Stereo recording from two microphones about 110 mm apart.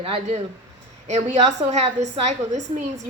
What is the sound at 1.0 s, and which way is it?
A woman's voice, 90° right.